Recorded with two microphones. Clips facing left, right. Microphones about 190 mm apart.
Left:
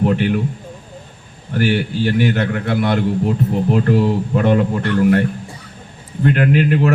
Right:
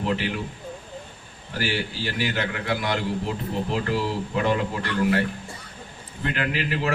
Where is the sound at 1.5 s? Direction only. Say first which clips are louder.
Left 10 dB; 55° left (ahead or behind).